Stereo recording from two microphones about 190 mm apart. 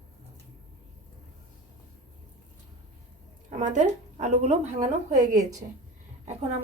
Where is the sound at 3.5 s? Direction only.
40° right (ahead or behind).